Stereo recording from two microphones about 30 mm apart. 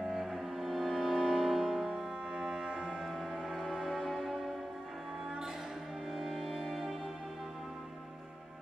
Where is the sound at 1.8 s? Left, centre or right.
Right.